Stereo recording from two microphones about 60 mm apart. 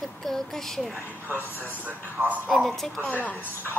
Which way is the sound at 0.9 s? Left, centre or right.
Right.